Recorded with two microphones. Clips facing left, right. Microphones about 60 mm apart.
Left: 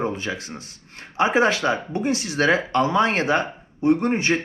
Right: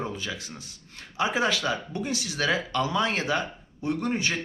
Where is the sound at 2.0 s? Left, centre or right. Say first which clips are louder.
Left 8 dB; left.